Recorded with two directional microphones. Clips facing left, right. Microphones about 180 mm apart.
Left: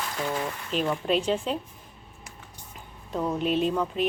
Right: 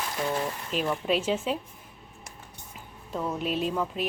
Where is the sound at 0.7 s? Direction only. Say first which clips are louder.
Left 2 dB; centre (ahead or behind).